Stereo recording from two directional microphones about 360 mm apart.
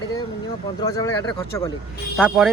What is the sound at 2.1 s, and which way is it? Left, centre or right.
Speech, centre.